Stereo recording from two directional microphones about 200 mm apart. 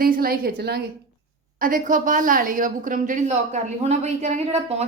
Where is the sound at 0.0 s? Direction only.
45° right (ahead or behind).